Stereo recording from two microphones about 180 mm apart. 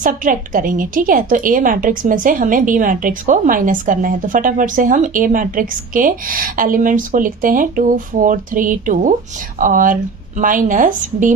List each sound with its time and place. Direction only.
0.0 s a woman's voice: 50° right (ahead or behind)